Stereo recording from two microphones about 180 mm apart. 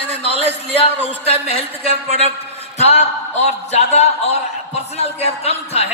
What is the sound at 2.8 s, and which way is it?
A man's voice, 35° left (ahead or behind).